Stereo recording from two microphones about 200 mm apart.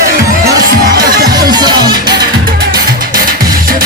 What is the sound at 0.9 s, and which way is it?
Music, 45° right (ahead or behind).